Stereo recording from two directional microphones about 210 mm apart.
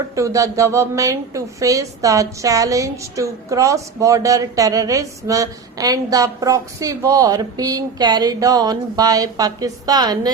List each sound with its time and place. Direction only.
0.2 s a woman's voice: 15° right (ahead or behind)